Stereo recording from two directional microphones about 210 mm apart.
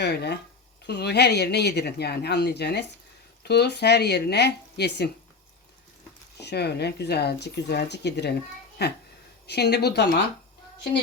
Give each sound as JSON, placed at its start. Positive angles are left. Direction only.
{"t": 0.0, "sound": "a sound", "side_deg": 50}
{"t": 0.9, "sound": "speech", "side_deg": 50}
{"t": 6.4, "sound": "speech", "side_deg": 50}